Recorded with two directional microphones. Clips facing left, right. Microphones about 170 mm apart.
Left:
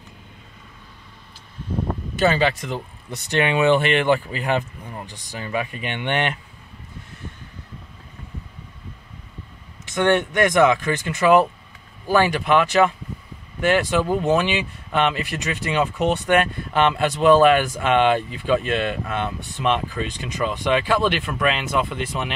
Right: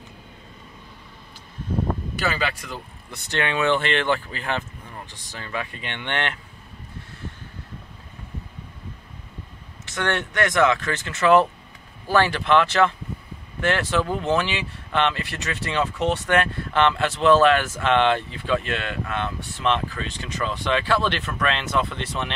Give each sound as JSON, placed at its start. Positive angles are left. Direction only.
{"t": 2.2, "sound": "speech", "side_deg": 25}
{"t": 9.9, "sound": "speech", "side_deg": 20}